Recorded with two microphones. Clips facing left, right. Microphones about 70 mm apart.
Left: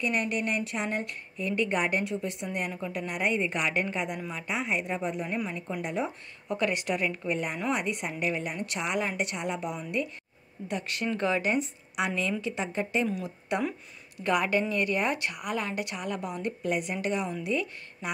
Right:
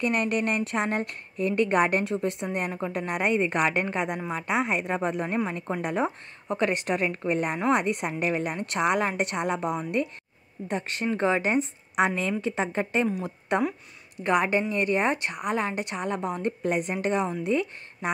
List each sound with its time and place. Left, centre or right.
0.0 s a woman's voice: right
6.4 s a woman's voice: right
10.7 s a woman's voice: right
14.1 s a woman's voice: right